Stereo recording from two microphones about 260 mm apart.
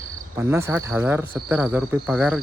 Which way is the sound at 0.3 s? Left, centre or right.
Centre.